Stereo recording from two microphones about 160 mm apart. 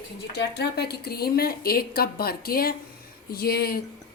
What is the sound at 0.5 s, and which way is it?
A woman's voice, 90° left.